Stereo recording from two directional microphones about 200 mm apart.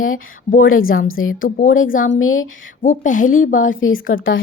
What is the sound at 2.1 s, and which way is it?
Speech, 85° left.